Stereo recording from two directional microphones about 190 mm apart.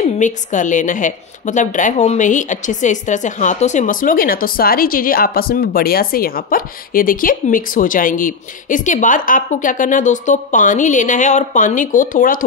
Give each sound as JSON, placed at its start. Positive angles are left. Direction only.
{"t": 0.2, "sound": "a woman's voice", "side_deg": 40}